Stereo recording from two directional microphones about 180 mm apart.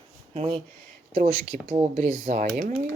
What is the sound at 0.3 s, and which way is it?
Speech, 30° right (ahead or behind).